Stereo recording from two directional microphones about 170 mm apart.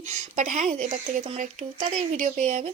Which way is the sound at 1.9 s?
45° right (ahead or behind).